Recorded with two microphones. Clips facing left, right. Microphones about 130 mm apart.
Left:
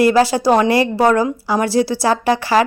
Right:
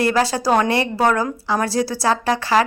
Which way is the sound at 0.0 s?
25° left (ahead or behind).